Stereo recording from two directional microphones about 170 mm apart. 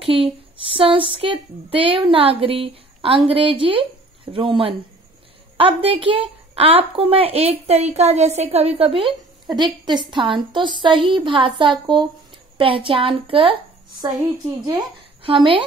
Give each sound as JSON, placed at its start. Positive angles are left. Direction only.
{"t": 0.0, "sound": "a sound", "side_deg": -30}
{"t": 0.7, "sound": "a woman's voice", "side_deg": -30}
{"t": 15.2, "sound": "a woman's voice", "side_deg": -30}